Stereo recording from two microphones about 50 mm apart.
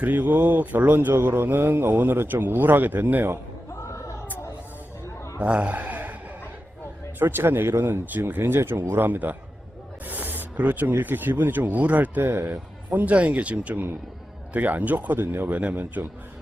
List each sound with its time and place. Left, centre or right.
0.0 s speech: right
3.8 s a sound: left
5.4 s a sound: right
7.2 s speech: right
12.2 s speech: right
12.9 s speech: right